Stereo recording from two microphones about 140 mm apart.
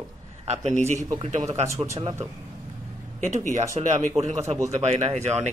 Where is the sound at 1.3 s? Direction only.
50° right (ahead or behind).